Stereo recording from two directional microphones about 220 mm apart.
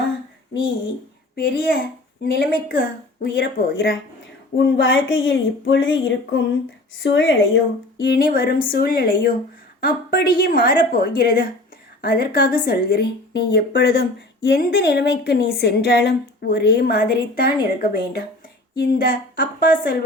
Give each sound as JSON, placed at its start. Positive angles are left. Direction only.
{"t": 1.4, "sound": "speech", "side_deg": 45}
{"t": 8.0, "sound": "a woman's voice", "side_deg": 45}